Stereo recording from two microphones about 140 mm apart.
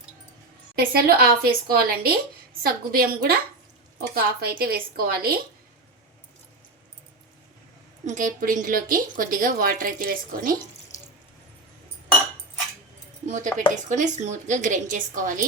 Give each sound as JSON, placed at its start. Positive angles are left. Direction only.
{"t": 0.8, "sound": "speech", "side_deg": -90}
{"t": 8.0, "sound": "a woman's voice", "side_deg": -65}
{"t": 13.2, "sound": "a woman's voice", "side_deg": -60}